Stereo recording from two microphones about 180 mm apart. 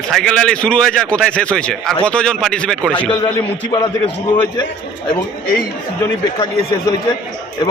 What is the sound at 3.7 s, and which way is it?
Speech, 25° left (ahead or behind).